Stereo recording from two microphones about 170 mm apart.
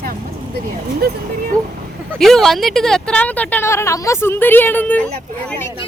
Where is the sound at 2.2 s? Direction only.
Centre (ahead or behind).